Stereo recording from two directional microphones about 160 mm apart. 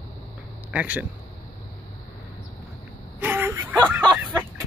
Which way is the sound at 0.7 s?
10° right (ahead or behind).